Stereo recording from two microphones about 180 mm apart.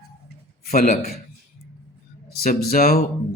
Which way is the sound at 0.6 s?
55° left (ahead or behind).